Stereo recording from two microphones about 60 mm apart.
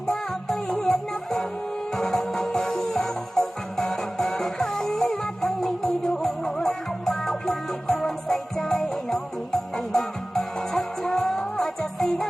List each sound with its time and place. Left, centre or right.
0.1 s music: centre